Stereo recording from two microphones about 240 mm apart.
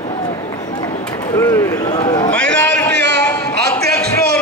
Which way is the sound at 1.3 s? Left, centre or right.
Centre.